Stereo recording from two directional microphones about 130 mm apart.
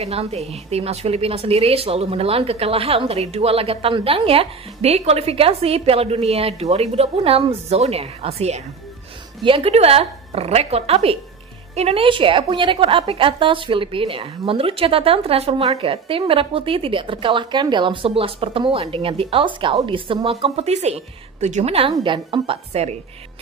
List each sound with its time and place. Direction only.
0.0 s a woman's voice: 55° right (ahead or behind)
21.9 s a woman's voice: 40° right (ahead or behind)
22.7 s a woman's voice: 55° right (ahead or behind)